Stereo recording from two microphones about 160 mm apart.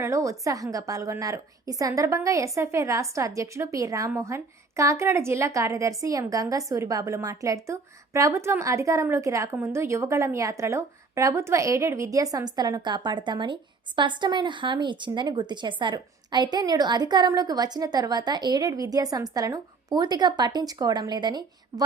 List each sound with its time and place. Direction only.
0.0 s a woman's voice: 20° right (ahead or behind)